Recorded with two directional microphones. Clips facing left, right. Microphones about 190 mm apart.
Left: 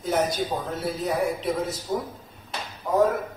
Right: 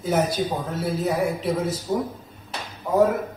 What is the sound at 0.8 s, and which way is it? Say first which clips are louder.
A woman's voice: right 3 dB; 5° right (ahead or behind).